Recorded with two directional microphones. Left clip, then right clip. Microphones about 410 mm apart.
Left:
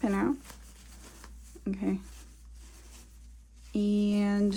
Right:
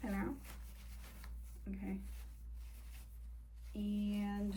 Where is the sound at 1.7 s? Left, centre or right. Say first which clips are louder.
Left 15 dB; centre.